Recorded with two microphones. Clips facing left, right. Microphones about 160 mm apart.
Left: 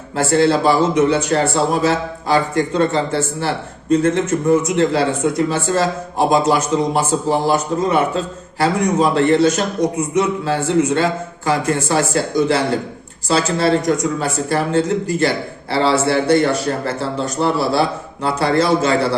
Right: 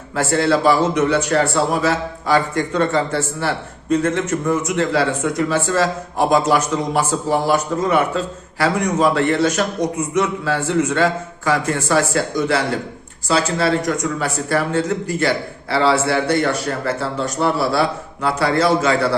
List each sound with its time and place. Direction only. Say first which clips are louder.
0.2 s a man's voice: left 2 dB; 30° left (ahead or behind)